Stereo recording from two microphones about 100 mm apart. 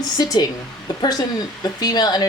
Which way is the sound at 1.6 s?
40° left (ahead or behind).